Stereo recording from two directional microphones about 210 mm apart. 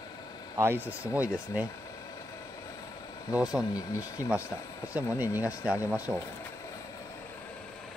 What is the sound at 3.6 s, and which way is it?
Speech, 15° left (ahead or behind).